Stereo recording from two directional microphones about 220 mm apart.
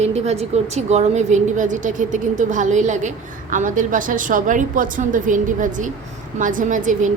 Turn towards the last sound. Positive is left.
turn(degrees=-35)  # may be behind; listen again after turning